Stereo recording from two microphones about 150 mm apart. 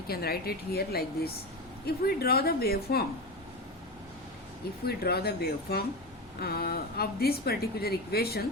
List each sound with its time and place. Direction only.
0.1 s a woman's voice: 90° left
4.9 s a woman's voice: 90° left